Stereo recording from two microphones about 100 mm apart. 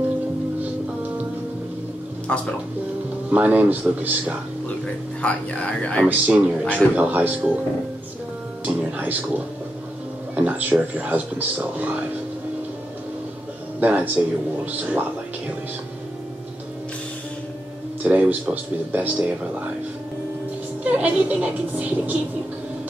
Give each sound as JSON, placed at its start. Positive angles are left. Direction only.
{"t": 3.3, "sound": "speech", "side_deg": -15}
{"t": 5.2, "sound": "speech", "side_deg": 10}
{"t": 6.0, "sound": "speech", "side_deg": -15}
{"t": 6.6, "sound": "speech", "side_deg": 10}
{"t": 7.0, "sound": "speech", "side_deg": -15}
{"t": 8.6, "sound": "speech", "side_deg": -15}
{"t": 13.7, "sound": "speech", "side_deg": -15}
{"t": 18.0, "sound": "speech", "side_deg": -15}
{"t": 20.8, "sound": "speech", "side_deg": -15}